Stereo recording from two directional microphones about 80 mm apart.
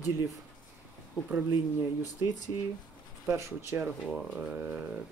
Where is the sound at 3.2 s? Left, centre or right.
Right.